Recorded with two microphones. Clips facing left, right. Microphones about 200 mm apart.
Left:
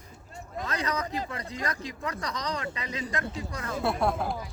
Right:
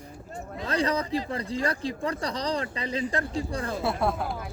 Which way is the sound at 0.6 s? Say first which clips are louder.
Right 5 dB; 30° right (ahead or behind).